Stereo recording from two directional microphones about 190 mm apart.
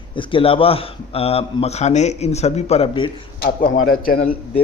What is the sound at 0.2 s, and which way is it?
A man's voice, 30° left (ahead or behind).